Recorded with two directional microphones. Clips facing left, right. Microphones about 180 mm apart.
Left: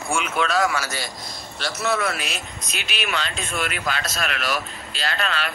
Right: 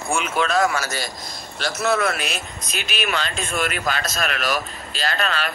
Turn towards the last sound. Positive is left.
turn(degrees=-45)  # may be behind; listen again after turning